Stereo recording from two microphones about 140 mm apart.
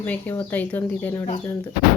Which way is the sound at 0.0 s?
10° left (ahead or behind).